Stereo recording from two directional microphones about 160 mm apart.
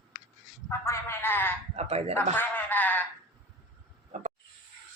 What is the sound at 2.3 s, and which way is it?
Speech, 10° left (ahead or behind).